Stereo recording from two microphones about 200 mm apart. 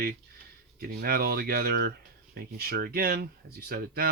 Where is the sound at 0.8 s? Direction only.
50° right (ahead or behind).